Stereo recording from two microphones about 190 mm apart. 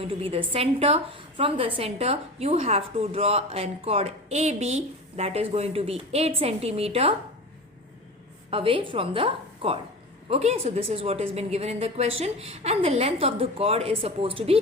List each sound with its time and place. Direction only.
0.0 s a woman's voice: 30° right (ahead or behind)
8.4 s a woman's voice: 30° right (ahead or behind)